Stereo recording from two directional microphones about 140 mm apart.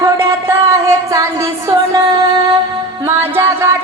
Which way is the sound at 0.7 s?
20° right (ahead or behind).